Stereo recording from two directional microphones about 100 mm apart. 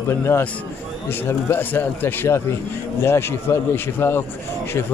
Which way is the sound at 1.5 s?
20° left (ahead or behind).